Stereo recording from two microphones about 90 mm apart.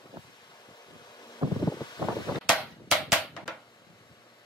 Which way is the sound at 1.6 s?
45° left (ahead or behind).